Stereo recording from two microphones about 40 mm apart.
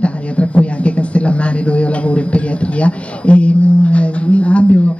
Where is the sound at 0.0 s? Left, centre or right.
Left.